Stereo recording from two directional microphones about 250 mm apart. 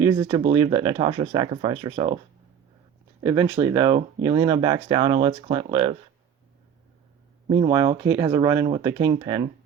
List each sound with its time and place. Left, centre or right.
0.0 s speech: centre
3.2 s speech: centre
7.5 s speech: centre